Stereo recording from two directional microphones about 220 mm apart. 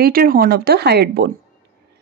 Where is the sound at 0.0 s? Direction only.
40° right (ahead or behind).